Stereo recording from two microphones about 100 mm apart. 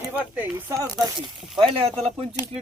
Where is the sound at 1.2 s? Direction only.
55° right (ahead or behind).